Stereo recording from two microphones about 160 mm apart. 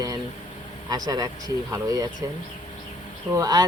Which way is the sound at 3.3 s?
20° right (ahead or behind).